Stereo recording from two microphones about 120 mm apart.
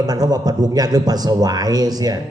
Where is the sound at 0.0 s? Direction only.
35° right (ahead or behind).